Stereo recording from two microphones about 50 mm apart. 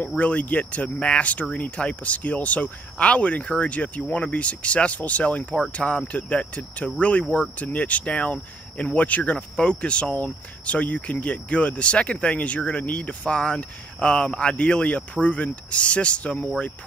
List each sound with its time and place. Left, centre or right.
0.2 s speech: left